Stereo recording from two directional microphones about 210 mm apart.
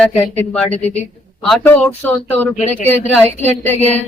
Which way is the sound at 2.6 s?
35° left (ahead or behind).